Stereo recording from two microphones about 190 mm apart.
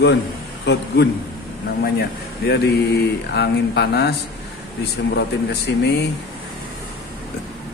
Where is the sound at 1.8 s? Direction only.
55° left (ahead or behind).